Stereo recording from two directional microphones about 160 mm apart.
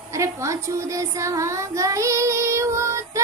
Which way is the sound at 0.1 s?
20° right (ahead or behind).